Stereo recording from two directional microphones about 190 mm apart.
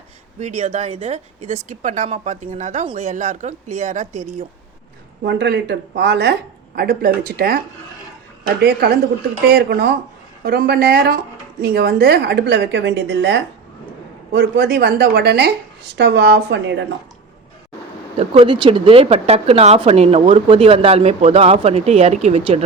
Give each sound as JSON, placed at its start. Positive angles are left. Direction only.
{"t": 0.3, "sound": "a woman's voice", "side_deg": -40}
{"t": 5.2, "sound": "a woman's voice", "side_deg": -65}
{"t": 8.6, "sound": "a woman's voice", "side_deg": -55}
{"t": 18.2, "sound": "a woman's voice", "side_deg": -25}